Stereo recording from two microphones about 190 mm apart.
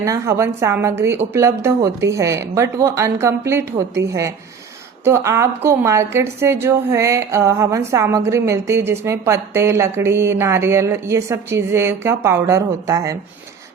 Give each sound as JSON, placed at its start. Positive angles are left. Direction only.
{"t": 0.0, "sound": "a woman's voice", "side_deg": -15}